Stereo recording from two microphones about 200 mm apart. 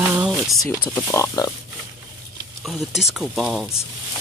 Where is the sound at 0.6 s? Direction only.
10° left (ahead or behind).